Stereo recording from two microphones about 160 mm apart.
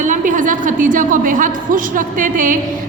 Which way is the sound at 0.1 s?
55° right (ahead or behind).